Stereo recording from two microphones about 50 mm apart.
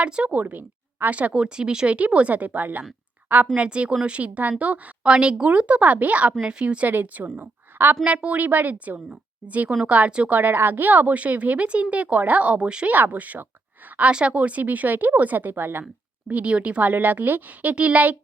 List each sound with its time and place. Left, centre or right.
0.3 s speech: right
1.3 s speech: centre
2.0 s a woman's voice: right
3.5 s a woman's voice: right
5.0 s a woman's voice: centre
6.8 s a woman's voice: right
10.2 s a woman's voice: right
12.9 s speech: right
14.1 s speech: right
16.3 s speech: right